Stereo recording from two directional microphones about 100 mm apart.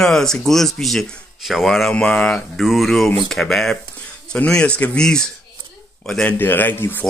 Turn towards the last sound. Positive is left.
turn(degrees=20)  # may be behind; listen again after turning